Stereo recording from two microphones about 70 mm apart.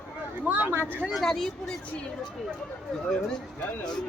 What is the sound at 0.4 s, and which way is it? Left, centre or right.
Speech, right.